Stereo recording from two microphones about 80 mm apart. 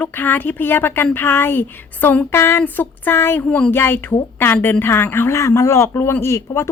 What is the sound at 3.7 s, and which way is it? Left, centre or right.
Speech, left.